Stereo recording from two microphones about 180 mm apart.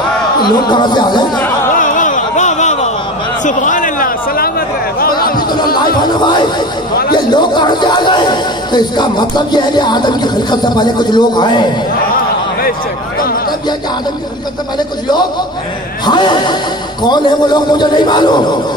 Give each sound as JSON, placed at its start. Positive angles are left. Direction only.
{"t": 0.4, "sound": "speech", "side_deg": 25}
{"t": 1.3, "sound": "a sound", "side_deg": 10}
{"t": 1.8, "sound": "a sound", "side_deg": 45}
{"t": 3.4, "sound": "chatter", "side_deg": 45}
{"t": 6.0, "sound": "speech", "side_deg": 25}
{"t": 16.1, "sound": "speech", "side_deg": 25}